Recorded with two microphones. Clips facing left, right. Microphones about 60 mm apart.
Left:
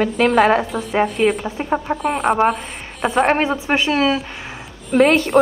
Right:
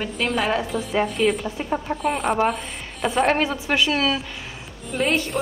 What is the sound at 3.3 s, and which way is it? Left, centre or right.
Speech, left.